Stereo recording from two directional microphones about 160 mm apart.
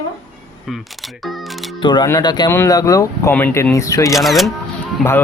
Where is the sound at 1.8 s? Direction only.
30° left (ahead or behind).